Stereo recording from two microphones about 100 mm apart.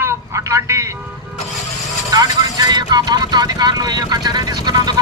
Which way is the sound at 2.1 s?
40° right (ahead or behind).